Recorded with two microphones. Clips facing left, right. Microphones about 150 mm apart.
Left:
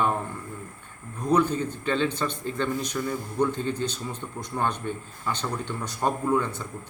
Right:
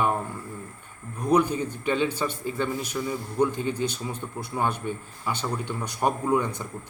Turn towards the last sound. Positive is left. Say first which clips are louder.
# even
turn(degrees=-15)  # may be behind; listen again after turning